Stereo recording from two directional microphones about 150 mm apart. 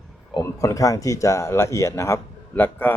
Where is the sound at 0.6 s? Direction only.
20° left (ahead or behind).